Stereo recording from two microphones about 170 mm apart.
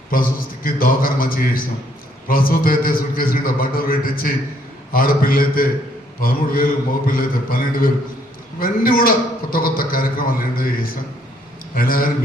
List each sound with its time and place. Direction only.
0.1 s a man's voice: 55° left (ahead or behind)
11.7 s a man's voice: 55° left (ahead or behind)